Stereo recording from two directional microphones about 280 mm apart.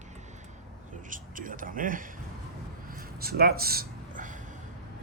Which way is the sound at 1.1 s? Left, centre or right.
Right.